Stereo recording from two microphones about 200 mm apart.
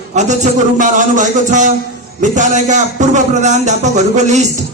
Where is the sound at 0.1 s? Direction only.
35° right (ahead or behind).